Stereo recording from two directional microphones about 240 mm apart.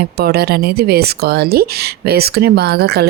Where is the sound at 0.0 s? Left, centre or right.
Right.